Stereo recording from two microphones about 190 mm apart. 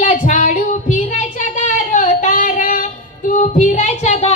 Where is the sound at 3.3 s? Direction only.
40° left (ahead or behind).